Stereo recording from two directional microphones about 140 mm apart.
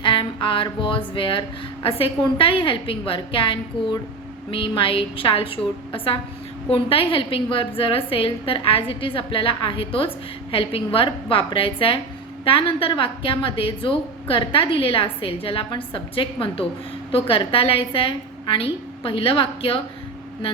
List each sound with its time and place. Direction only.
0.0 s a woman's voice: 35° left (ahead or behind)